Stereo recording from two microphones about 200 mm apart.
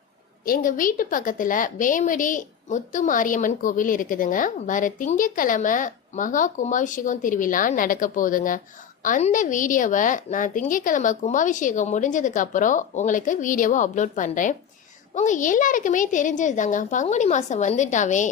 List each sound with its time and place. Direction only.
0.4 s a woman's voice: 45° left (ahead or behind)